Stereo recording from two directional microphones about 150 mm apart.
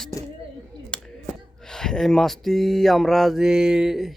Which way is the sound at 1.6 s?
5° left (ahead or behind).